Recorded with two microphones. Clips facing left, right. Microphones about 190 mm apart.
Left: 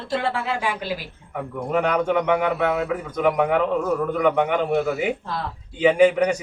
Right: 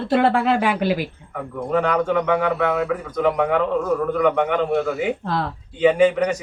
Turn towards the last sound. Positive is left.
turn(degrees=10)  # may be behind; listen again after turning